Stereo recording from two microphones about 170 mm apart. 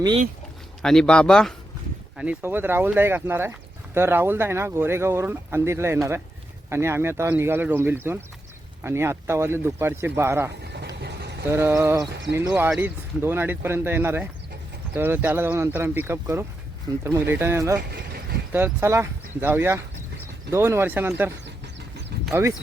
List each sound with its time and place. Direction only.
0.8 s speech: 5° left (ahead or behind)
2.1 s speech: 10° right (ahead or behind)
10.6 s vehicle: 75° right (ahead or behind)
11.4 s speech: 15° right (ahead or behind)
17.9 s a sound: 65° right (ahead or behind)
18.5 s speech: 15° right (ahead or behind)